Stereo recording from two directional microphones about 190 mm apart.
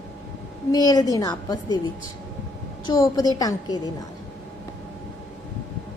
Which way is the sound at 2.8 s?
20° left (ahead or behind).